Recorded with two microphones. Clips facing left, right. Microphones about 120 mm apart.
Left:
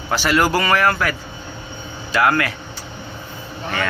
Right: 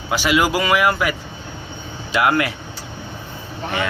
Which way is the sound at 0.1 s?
10° right (ahead or behind).